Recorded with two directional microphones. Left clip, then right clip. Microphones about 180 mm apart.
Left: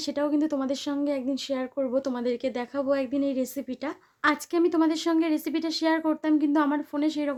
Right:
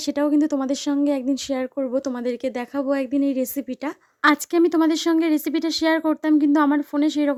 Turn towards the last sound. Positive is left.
turn(degrees=-45)  # may be behind; listen again after turning